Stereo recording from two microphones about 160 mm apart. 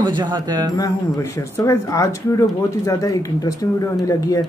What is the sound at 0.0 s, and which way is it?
Speech, 30° right (ahead or behind).